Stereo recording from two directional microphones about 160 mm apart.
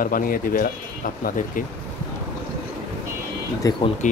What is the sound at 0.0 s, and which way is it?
Speech, 65° left (ahead or behind).